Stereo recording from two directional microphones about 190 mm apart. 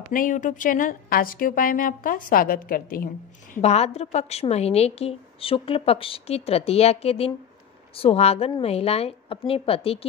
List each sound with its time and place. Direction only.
0.1 s a woman's voice: 45° left (ahead or behind)
3.5 s a woman's voice: 35° left (ahead or behind)